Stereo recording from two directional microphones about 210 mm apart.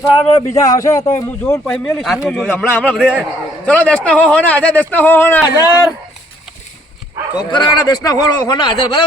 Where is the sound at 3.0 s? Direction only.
5° right (ahead or behind).